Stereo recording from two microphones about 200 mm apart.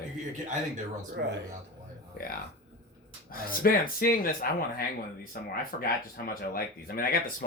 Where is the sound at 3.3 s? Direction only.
45° left (ahead or behind).